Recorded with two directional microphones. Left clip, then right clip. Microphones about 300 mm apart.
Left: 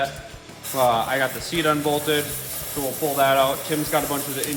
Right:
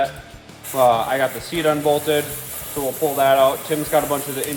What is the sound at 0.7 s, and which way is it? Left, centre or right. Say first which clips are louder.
Speech: right 4 dB; right.